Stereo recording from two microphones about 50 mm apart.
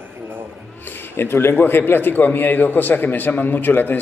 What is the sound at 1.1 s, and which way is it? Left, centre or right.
A man's voice, left.